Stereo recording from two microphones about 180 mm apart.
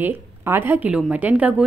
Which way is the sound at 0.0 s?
10° right (ahead or behind).